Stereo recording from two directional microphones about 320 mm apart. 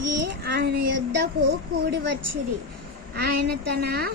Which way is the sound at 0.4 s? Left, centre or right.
Right.